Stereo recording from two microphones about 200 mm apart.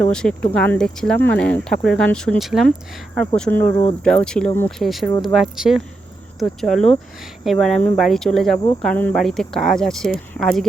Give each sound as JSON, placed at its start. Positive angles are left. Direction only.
{"t": 0.0, "sound": "speech", "side_deg": 5}
{"t": 8.5, "sound": "speech", "side_deg": 20}
{"t": 8.8, "sound": "speech", "side_deg": 5}